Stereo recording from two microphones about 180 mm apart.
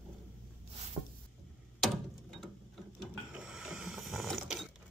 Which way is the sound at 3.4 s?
5° right (ahead or behind).